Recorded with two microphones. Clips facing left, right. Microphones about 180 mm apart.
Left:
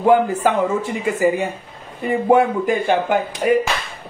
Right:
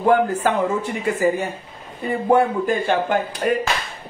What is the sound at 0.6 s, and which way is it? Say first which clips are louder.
Speech: left 2 dB; 15° left (ahead or behind).